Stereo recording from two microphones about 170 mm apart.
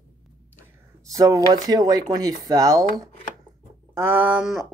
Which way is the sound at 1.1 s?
20° right (ahead or behind).